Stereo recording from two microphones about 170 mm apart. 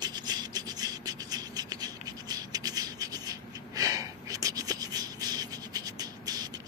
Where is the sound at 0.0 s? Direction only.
25° right (ahead or behind).